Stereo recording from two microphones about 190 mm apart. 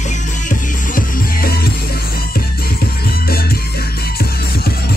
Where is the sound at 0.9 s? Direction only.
55° left (ahead or behind).